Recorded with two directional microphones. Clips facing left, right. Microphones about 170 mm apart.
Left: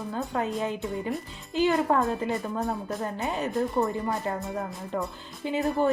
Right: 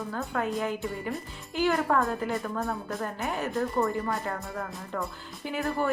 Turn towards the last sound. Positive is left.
turn(degrees=20)  # may be behind; listen again after turning